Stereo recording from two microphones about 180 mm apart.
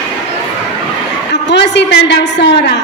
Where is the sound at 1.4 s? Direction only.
75° left (ahead or behind).